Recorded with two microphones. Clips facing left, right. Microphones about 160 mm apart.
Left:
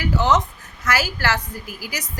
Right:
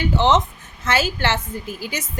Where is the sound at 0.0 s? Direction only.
25° right (ahead or behind).